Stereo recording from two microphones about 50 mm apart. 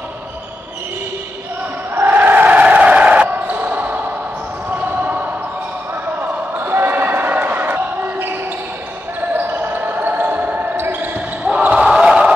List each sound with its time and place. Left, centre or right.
2.0 s basketball bounce: right
6.5 s basketball bounce: right
11.4 s basketball bounce: right